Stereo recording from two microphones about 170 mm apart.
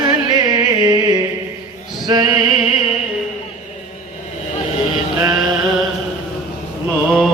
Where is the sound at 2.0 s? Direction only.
25° right (ahead or behind).